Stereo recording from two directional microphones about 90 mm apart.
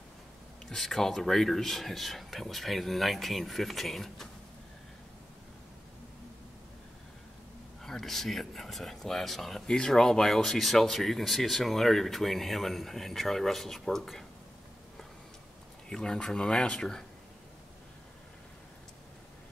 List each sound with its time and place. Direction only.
0.7 s speech: 5° left (ahead or behind)
7.8 s speech: 5° left (ahead or behind)
15.9 s speech: 10° left (ahead or behind)